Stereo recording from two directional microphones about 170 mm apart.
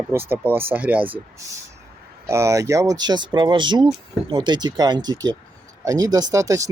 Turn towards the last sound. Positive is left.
turn(degrees=-20)  # may be behind; listen again after turning